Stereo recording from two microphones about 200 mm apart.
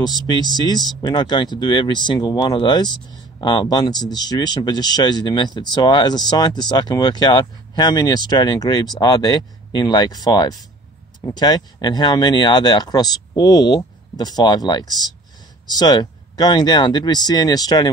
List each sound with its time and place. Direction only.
0.0 s speech: 20° left (ahead or behind)